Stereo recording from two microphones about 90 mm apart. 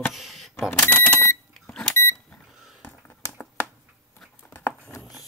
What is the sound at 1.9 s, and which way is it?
Microwave oven, 30° left (ahead or behind).